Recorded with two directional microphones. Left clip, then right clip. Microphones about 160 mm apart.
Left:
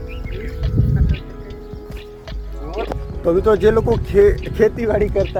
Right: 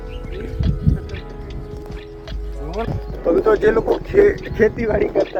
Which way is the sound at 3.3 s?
15° left (ahead or behind).